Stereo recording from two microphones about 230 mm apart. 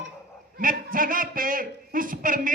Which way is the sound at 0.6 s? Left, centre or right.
Right.